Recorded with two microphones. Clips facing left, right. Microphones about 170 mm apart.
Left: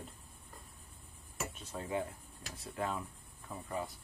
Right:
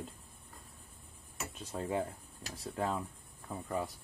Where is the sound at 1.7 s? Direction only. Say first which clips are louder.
Right 3 dB; 35° right (ahead or behind).